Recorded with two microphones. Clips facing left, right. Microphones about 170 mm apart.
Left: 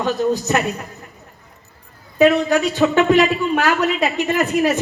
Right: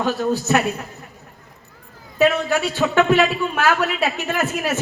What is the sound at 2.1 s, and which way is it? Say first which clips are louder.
A man's voice: left 4 dB; 15° left (ahead or behind).